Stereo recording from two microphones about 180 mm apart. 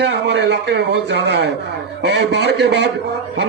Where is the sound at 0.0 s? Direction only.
70° right (ahead or behind).